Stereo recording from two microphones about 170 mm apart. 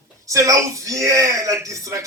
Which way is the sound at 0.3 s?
20° right (ahead or behind).